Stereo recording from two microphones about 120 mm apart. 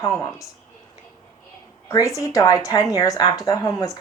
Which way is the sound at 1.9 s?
25° left (ahead or behind).